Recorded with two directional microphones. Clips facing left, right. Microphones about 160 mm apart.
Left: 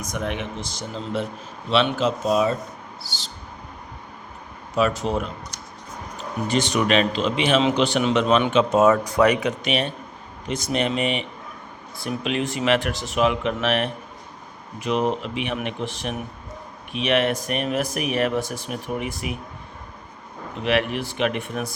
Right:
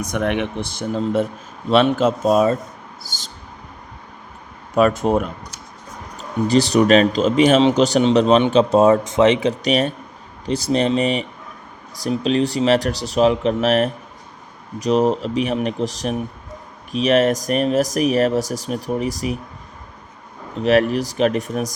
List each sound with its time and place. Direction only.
0.0 s speech: 65° right (ahead or behind); by 3.2 s 45° right (ahead or behind)
4.7 s speech: 50° right (ahead or behind)
6.5 s speech: 35° right (ahead or behind)
20.6 s speech: 40° right (ahead or behind)